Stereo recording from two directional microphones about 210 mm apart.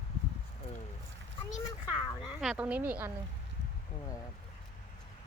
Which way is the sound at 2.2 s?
Centre (ahead or behind).